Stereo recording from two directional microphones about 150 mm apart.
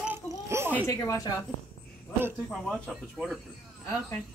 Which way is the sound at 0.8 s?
25° left (ahead or behind).